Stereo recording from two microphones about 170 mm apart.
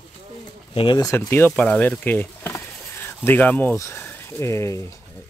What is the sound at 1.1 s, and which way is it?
A man's voice, 15° left (ahead or behind).